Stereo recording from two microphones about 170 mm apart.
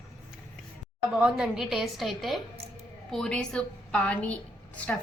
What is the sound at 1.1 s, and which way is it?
A woman's voice, 5° right (ahead or behind).